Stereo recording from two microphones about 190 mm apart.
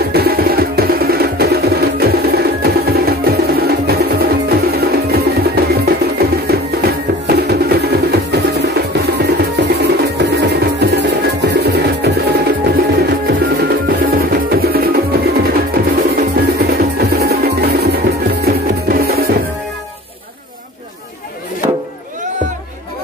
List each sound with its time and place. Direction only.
0.0 s music: 55° right (ahead or behind)